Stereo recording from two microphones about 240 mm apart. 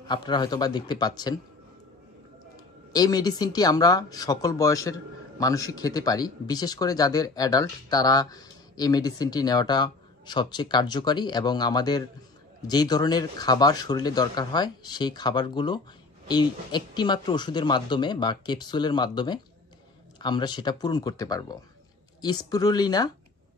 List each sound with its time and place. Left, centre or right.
0.0 s speech: centre
2.9 s speech: centre